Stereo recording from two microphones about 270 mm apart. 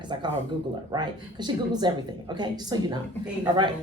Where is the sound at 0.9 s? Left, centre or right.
Centre.